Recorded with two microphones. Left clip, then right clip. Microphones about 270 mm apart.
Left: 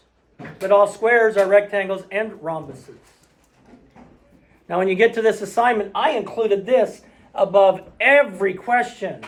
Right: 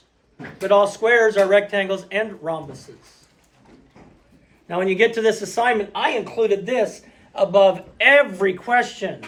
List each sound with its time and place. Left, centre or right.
0.6 s speech: centre
4.7 s speech: centre